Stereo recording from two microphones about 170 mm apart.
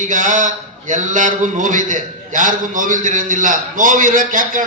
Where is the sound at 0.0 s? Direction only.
45° right (ahead or behind).